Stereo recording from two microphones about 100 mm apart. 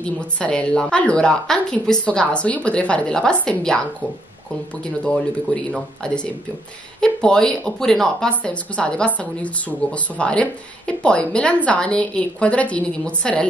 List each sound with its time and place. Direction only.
0.0 s speech: 10° left (ahead or behind)
5.0 s speech: 10° left (ahead or behind)